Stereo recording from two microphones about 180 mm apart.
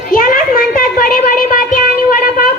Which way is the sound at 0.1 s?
50° left (ahead or behind).